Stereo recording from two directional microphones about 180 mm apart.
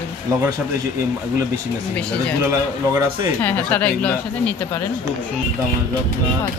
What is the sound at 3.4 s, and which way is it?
A woman's voice, 10° left (ahead or behind).